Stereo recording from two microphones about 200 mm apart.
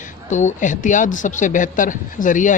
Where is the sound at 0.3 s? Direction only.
35° left (ahead or behind).